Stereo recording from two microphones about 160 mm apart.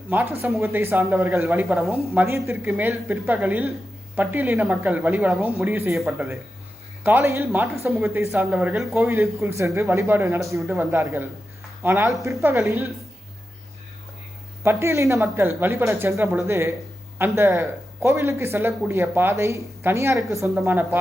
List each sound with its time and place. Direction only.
0.1 s speech: 10° right (ahead or behind)
6.0 s speech: centre (ahead or behind)
7.0 s speech: 15° right (ahead or behind)
9.0 s speech: 15° right (ahead or behind)
14.6 s speech: 15° right (ahead or behind)